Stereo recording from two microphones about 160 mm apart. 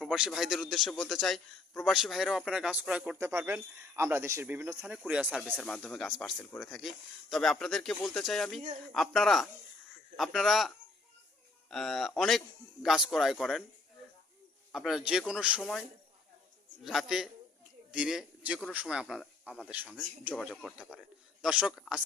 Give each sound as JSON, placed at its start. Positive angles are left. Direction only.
{"t": 0.0, "sound": "a man's voice", "side_deg": 0}
{"t": 3.2, "sound": "speech", "side_deg": -15}
{"t": 5.0, "sound": "a man's voice", "side_deg": -5}
{"t": 11.7, "sound": "a man's voice", "side_deg": 0}
{"t": 14.7, "sound": "a man's voice", "side_deg": -5}